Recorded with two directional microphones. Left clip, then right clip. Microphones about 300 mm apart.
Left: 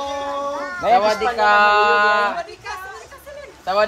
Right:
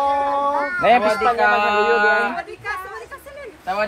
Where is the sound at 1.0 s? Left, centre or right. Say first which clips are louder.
Even; left.